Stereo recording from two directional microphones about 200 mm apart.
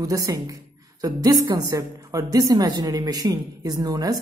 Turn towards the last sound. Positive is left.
turn(degrees=-15)  # may be behind; listen again after turning